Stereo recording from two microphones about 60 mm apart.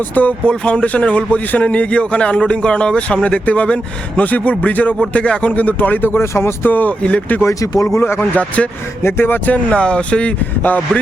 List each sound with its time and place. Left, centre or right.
0.2 s a man's voice: left
6.1 s speech: left
6.7 s a man's voice: left
7.4 s speech: left
8.2 s a man's voice: left
9.0 s speech: left
9.6 s a man's voice: centre